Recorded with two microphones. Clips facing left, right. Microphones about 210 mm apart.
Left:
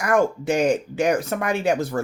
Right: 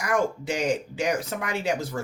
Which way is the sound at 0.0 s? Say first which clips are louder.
Left 5 dB; 55° left (ahead or behind).